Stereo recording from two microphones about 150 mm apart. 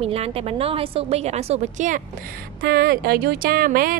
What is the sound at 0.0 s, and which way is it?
A woman's voice, 40° right (ahead or behind).